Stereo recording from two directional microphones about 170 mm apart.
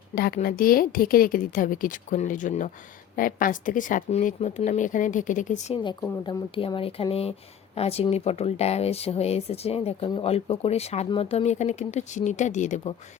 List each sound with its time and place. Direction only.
0.1 s a woman's voice: 60° left (ahead or behind)
6.0 s speech: 25° left (ahead or behind); by 12.9 s 45° left (ahead or behind)